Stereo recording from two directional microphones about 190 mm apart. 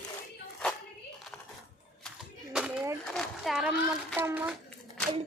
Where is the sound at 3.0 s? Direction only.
Centre (ahead or behind).